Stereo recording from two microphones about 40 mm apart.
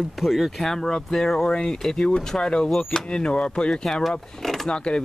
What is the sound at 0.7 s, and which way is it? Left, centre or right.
Speech, centre.